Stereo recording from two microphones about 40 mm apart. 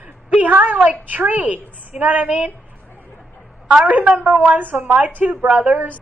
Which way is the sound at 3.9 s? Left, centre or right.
Right.